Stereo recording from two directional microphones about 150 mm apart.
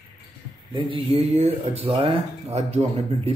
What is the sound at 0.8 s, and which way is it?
Speech, 35° right (ahead or behind).